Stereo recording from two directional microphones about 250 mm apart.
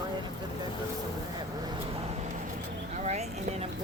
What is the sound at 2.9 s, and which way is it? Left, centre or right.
Vehicle, right.